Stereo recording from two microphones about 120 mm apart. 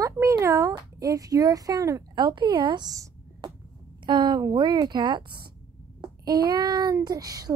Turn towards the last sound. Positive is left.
turn(degrees=-30)  # may be behind; listen again after turning